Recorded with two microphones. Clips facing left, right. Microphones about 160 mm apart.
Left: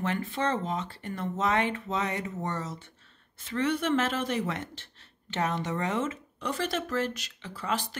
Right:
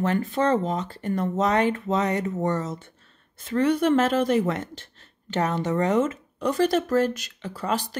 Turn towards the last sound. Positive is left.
turn(degrees=-40)  # may be behind; listen again after turning